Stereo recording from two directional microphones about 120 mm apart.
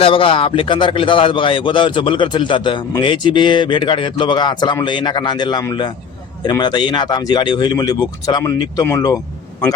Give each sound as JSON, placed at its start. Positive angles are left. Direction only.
{"t": 0.0, "sound": "a man's voice", "side_deg": 45}